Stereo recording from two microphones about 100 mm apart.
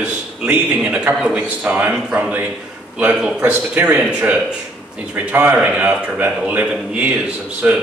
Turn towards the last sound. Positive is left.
turn(degrees=-15)  # may be behind; listen again after turning